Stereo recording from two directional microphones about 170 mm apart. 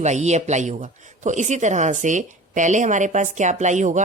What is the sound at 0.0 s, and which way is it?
A woman's voice, 40° right (ahead or behind).